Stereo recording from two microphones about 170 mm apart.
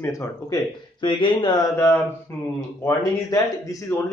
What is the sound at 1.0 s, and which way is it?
Speech, 30° left (ahead or behind).